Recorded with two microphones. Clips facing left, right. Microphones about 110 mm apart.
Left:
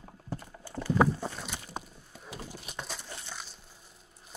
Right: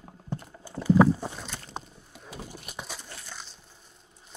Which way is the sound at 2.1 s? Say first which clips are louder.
Right 1 dB; centre (ahead or behind).